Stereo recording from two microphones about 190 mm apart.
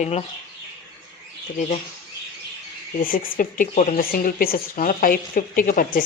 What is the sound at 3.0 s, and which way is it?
A woman's voice, 45° left (ahead or behind).